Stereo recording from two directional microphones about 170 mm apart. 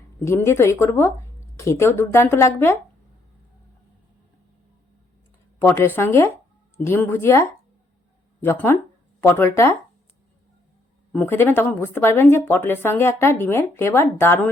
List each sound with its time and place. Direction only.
0.2 s speech: 15° left (ahead or behind)
5.5 s speech: 15° left (ahead or behind)
11.1 s speech: 10° left (ahead or behind)